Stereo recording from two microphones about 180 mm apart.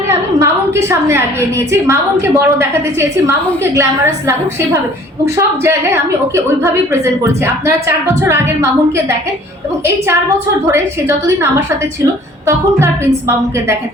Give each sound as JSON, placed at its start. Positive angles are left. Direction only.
{"t": 0.1, "sound": "a woman's voice", "side_deg": -15}
{"t": 12.5, "sound": "a woman's voice", "side_deg": -15}